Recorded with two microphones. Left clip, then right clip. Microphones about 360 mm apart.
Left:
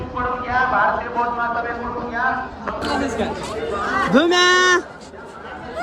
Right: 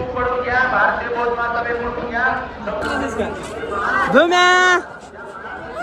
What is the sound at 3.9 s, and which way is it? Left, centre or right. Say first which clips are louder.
Speech: right 3 dB; centre.